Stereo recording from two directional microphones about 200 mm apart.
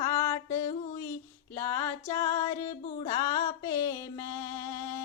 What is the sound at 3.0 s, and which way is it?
Music, 20° left (ahead or behind).